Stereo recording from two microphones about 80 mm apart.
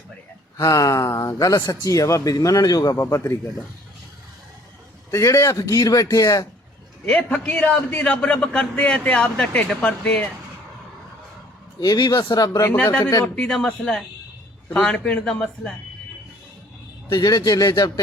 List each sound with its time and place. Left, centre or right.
0.5 s a man's voice: left
2.9 s speech: left
5.1 s a man's voice: left
7.0 s a man's voice: centre
11.8 s speech: left
12.7 s a man's voice: centre
17.1 s speech: left